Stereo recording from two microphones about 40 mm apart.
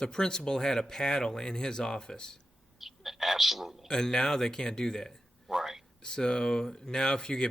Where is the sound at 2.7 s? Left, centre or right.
Centre.